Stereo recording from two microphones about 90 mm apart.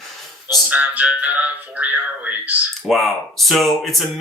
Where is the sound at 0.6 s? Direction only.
15° right (ahead or behind).